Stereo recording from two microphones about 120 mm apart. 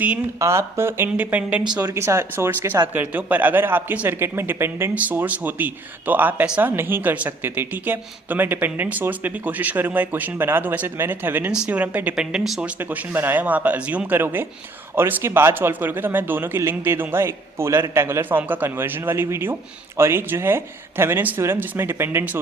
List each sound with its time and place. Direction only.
0.3 s speech: 25° right (ahead or behind)
1.8 s speech: 25° right (ahead or behind)